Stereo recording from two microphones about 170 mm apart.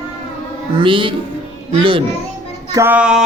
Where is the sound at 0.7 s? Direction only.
30° right (ahead or behind).